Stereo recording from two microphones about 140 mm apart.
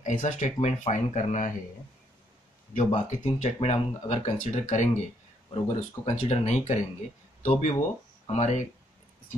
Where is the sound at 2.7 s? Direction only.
55° left (ahead or behind).